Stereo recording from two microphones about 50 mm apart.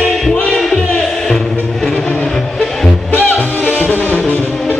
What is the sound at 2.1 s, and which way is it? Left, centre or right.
Music, left.